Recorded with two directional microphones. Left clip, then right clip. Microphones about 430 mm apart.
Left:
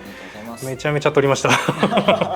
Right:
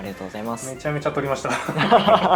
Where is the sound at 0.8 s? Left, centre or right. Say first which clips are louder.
Left 8 dB; left.